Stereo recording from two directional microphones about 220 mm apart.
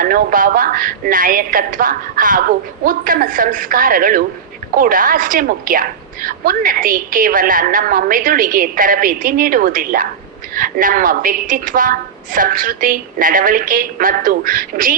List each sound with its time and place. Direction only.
0.0 s a woman's voice: 40° right (ahead or behind)